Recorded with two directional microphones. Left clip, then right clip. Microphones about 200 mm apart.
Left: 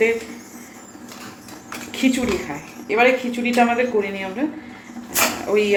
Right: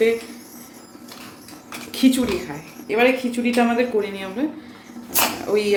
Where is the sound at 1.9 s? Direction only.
15° right (ahead or behind).